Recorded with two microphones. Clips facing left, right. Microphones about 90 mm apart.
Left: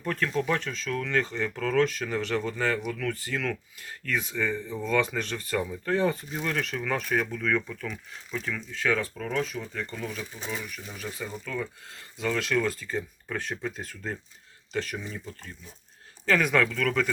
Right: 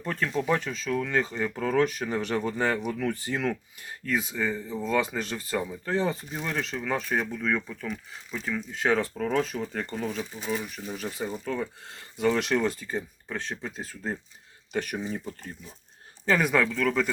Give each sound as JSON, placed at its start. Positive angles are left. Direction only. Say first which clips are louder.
{"t": 0.0, "sound": "speech", "louder": "even", "side_deg": -5}
{"t": 1.5, "sound": "speech", "louder": "even", "side_deg": -20}
{"t": 4.1, "sound": "speech", "louder": "right 1 dB", "side_deg": -5}
{"t": 9.1, "sound": "speech", "louder": "right 3 dB", "side_deg": -40}
{"t": 12.2, "sound": "speech", "louder": "right 3 dB", "side_deg": -25}
{"t": 13.0, "sound": "speech", "louder": "left 1 dB", "side_deg": -5}
{"t": 14.9, "sound": "speech", "louder": "right 4 dB", "side_deg": -30}
{"t": 16.4, "sound": "speech", "louder": "right 1 dB", "side_deg": -5}